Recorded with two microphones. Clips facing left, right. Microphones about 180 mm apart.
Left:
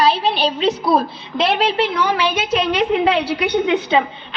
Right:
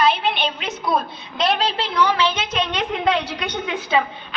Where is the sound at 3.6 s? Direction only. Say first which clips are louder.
Left 1 dB; 20° left (ahead or behind).